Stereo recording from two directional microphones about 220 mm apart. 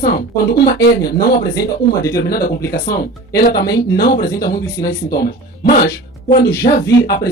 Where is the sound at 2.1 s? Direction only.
45° left (ahead or behind).